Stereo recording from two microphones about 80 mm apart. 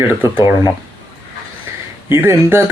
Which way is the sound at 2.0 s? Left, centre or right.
Right.